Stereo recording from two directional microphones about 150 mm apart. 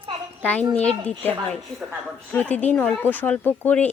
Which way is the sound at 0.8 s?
10° left (ahead or behind).